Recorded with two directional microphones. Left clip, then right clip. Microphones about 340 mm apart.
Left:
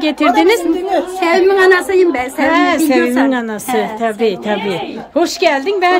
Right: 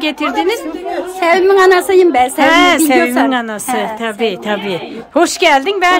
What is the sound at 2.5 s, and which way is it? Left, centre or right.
A woman's voice, centre.